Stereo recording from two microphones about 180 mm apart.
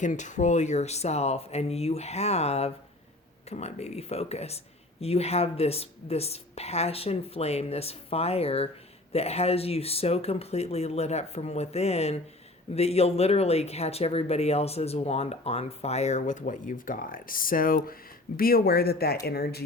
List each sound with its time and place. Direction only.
0.0 s speech: 45° left (ahead or behind); by 19.6 s 60° left (ahead or behind)